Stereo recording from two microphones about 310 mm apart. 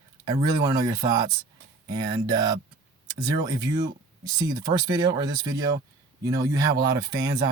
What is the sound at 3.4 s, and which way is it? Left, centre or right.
Speech, centre.